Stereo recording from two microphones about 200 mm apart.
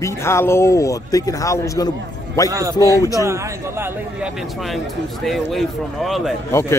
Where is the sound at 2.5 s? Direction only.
15° right (ahead or behind).